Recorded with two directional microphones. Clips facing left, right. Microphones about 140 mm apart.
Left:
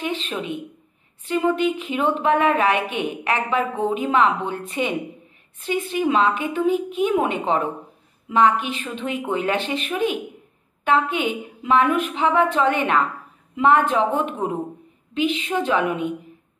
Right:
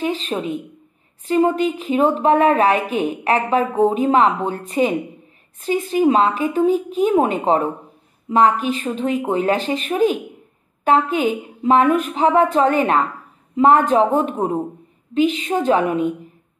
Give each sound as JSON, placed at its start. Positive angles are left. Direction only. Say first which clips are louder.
{"t": 0.0, "sound": "a woman's voice", "louder": "right 5 dB", "side_deg": -40}